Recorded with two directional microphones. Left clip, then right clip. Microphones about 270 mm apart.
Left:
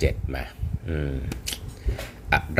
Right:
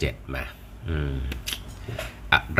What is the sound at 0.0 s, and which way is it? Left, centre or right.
Speech, centre.